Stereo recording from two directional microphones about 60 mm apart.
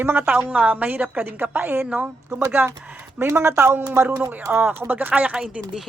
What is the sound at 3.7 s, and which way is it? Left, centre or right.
A man's voice, right.